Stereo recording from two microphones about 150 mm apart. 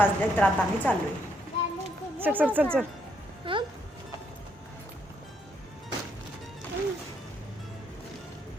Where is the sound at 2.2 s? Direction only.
10° right (ahead or behind).